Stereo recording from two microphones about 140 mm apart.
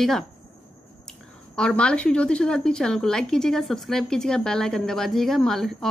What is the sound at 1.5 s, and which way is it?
A woman's voice, 5° left (ahead or behind).